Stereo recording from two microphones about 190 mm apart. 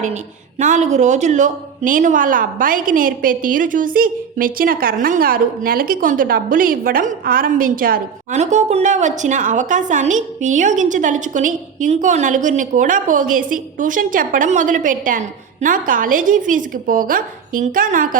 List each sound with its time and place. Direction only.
0.6 s a woman's voice: 40° right (ahead or behind)